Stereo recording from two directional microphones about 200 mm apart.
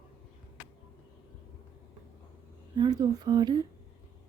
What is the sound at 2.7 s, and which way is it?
Speech, 20° right (ahead or behind).